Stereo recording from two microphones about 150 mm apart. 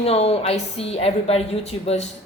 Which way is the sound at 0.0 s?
40° left (ahead or behind).